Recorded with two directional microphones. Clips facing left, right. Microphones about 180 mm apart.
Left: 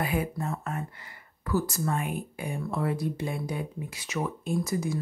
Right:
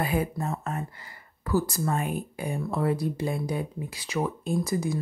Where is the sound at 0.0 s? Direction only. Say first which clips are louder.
Right 2 dB; 35° right (ahead or behind).